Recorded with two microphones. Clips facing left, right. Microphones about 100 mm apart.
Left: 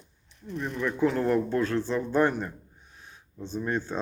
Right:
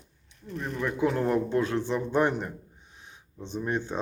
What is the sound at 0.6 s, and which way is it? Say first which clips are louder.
Speech: left 1 dB; 15° right (ahead or behind).